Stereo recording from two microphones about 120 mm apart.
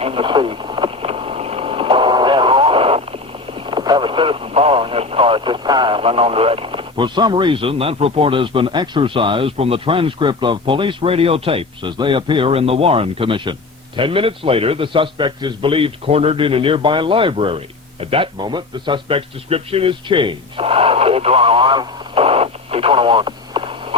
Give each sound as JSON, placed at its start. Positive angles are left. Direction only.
{"t": 0.0, "sound": "a man's voice", "side_deg": -50}